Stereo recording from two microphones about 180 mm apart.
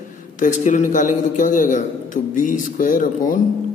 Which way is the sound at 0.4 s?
45° left (ahead or behind).